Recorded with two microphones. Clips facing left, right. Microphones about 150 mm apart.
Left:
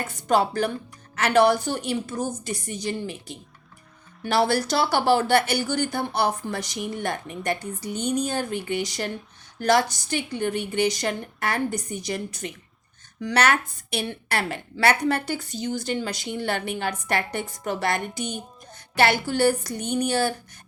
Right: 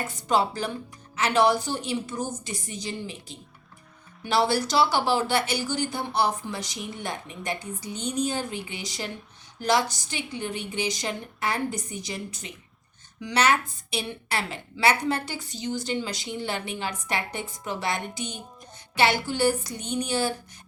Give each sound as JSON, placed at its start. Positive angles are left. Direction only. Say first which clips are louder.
{"t": 0.3, "sound": "a woman's voice", "louder": "left 3 dB", "side_deg": 55}